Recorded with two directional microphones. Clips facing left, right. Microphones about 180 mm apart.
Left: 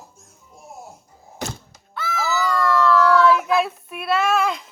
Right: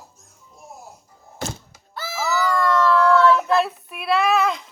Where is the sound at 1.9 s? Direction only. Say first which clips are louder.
Left 4 dB; 35° right (ahead or behind).